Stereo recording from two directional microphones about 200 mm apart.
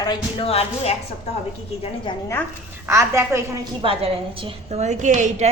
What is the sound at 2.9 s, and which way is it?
Speech, 15° right (ahead or behind).